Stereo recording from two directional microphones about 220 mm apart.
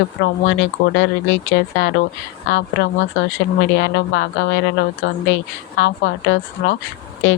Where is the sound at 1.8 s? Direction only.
55° left (ahead or behind).